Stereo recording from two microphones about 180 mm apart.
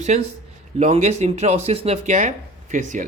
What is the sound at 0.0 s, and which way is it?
Speech, 40° right (ahead or behind).